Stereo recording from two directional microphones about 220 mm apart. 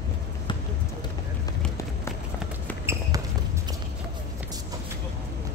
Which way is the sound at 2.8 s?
10° right (ahead or behind).